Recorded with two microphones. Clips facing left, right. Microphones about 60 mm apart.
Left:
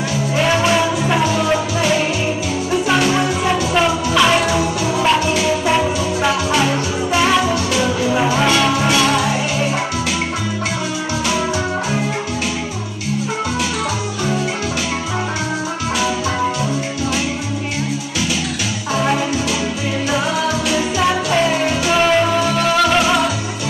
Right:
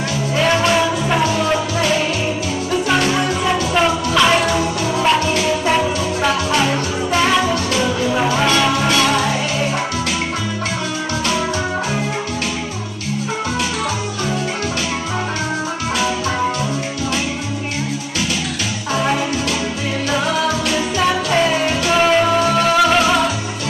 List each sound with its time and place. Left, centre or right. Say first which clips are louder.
0.5 s music: even; centre
3.2 s music: left 1 dB; centre
3.7 s music: even; centre
5.2 s music: left 1 dB; right
5.7 s music: even; centre
21.9 s music: right 1 dB; centre
22.9 s music: even; centre